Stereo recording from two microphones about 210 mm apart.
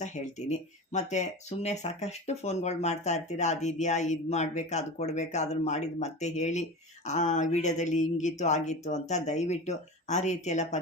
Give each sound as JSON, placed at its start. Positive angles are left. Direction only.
{"t": 0.0, "sound": "speech", "side_deg": 35}